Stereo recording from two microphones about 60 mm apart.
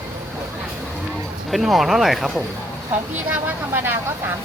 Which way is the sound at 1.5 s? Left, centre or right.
Centre.